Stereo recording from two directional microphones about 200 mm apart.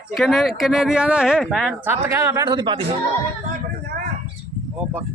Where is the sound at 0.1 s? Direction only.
Centre (ahead or behind).